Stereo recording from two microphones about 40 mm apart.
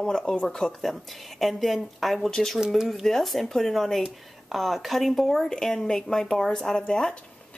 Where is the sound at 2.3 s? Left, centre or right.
Centre.